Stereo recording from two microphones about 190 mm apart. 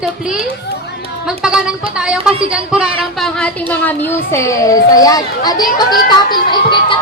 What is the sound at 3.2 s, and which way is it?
Speech, 5° left (ahead or behind).